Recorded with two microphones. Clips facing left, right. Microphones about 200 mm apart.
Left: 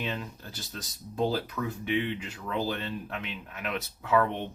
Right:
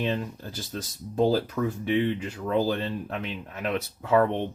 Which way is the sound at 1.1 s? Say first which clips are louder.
Right 6 dB; 40° right (ahead or behind).